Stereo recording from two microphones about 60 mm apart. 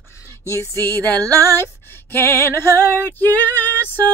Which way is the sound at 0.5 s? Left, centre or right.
Left.